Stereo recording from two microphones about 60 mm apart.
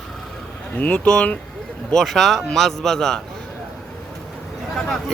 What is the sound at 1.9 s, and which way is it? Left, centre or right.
Speech, centre.